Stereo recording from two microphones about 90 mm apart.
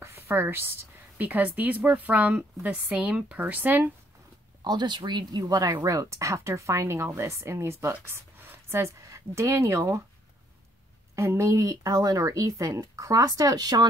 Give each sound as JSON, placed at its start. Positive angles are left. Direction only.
{"t": 0.0, "sound": "a woman's voice", "side_deg": -25}
{"t": 4.6, "sound": "speech", "side_deg": -55}
{"t": 11.1, "sound": "speech", "side_deg": -35}